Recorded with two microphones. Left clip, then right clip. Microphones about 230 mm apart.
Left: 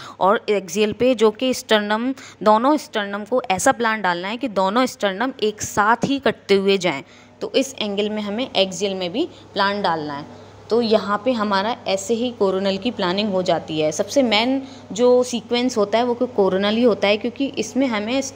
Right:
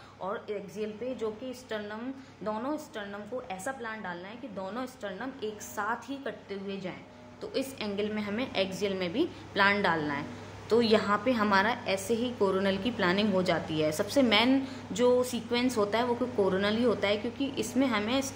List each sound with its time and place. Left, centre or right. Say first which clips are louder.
0.2 s a woman's voice: left 18 dB; left
7.5 s a woman's voice: left 12 dB; left